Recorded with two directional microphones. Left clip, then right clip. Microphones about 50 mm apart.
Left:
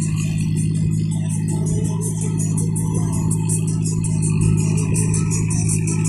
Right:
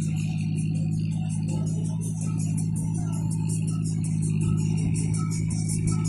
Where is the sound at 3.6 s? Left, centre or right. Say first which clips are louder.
Left 7 dB; right.